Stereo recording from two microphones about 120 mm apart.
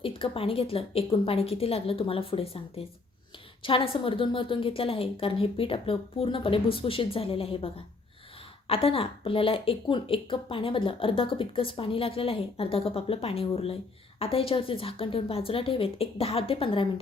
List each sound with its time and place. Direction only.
0.0 s speech: 50° left (ahead or behind)